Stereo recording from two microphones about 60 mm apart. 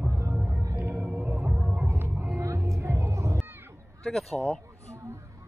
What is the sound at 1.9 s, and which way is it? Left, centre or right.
Music, right.